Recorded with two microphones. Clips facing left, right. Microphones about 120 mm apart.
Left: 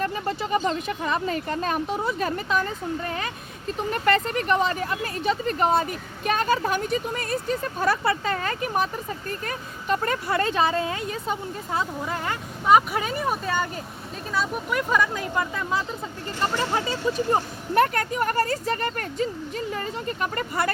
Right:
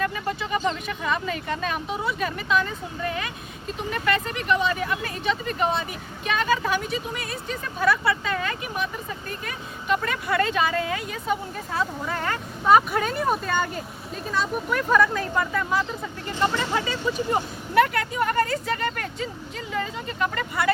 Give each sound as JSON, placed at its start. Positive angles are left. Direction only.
{"t": 0.0, "sound": "speech", "side_deg": 35}
{"t": 17.3, "sound": "speech", "side_deg": 40}